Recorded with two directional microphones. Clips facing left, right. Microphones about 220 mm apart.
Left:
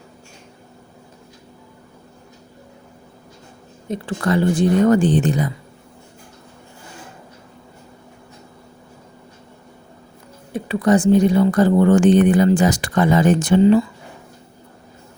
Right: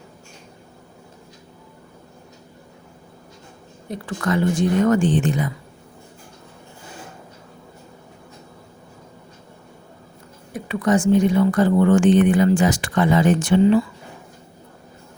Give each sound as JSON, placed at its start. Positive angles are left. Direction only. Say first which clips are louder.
{"t": 3.8, "sound": "speech", "louder": "left 3 dB", "side_deg": 25}
{"t": 10.5, "sound": "speech", "louder": "left 3 dB", "side_deg": 35}